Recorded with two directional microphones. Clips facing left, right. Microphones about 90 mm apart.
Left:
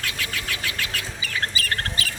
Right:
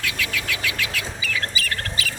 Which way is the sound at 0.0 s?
40° left (ahead or behind).